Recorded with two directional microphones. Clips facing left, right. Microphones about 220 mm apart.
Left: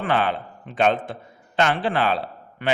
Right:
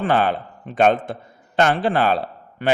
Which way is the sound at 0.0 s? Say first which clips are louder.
Right 3 dB; 40° right (ahead or behind).